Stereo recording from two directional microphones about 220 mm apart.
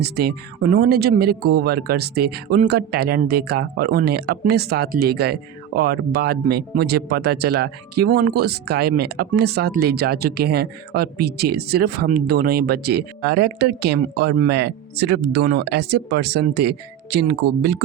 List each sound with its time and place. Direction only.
0.0 s speech: 45° right (ahead or behind)